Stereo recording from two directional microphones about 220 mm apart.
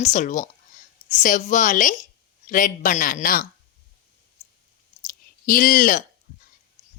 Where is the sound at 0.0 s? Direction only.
35° left (ahead or behind).